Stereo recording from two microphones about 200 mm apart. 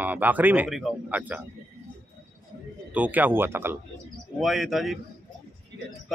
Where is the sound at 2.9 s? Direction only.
10° right (ahead or behind).